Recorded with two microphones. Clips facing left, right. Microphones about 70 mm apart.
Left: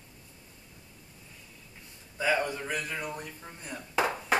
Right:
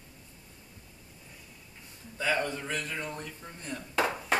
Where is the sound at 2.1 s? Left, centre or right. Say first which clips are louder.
Left 2 dB; centre.